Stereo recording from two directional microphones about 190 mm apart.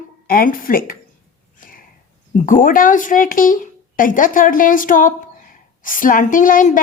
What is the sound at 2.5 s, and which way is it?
Speech, 45° left (ahead or behind).